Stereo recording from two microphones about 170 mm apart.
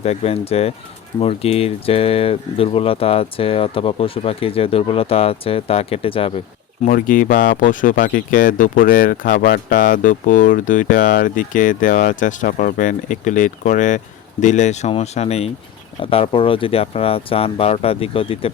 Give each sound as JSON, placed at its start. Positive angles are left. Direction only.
{"t": 0.0, "sound": "speech", "side_deg": 35}
{"t": 6.8, "sound": "speech", "side_deg": 50}